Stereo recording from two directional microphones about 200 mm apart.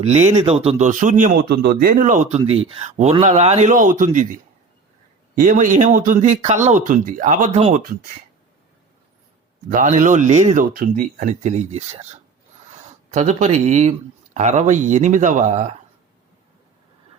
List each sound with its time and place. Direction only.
0.0 s speech: 35° right (ahead or behind)
5.4 s speech: 40° right (ahead or behind)
9.6 s speech: 40° right (ahead or behind)